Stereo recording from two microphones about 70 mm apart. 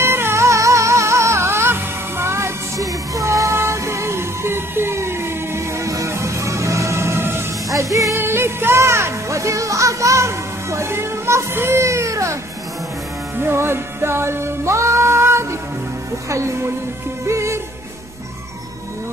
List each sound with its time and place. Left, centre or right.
0.0 s music: right
2.8 s music: right
13.4 s music: right
16.3 s speech: right
17.3 s music: right